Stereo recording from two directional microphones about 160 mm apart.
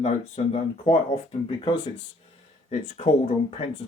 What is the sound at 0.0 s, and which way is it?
Speech, 40° left (ahead or behind).